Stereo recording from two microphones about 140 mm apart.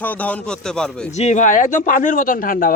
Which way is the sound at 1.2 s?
55° left (ahead or behind).